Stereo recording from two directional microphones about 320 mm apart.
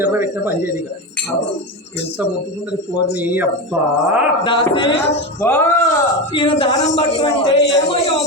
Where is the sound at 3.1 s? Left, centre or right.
Centre.